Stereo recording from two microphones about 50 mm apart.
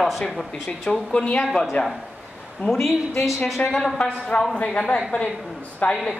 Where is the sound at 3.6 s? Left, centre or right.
Left.